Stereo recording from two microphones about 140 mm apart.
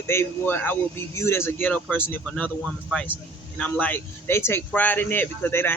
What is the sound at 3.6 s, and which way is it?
Speech, 10° left (ahead or behind).